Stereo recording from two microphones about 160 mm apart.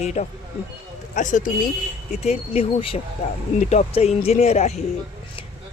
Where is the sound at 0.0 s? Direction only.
45° left (ahead or behind).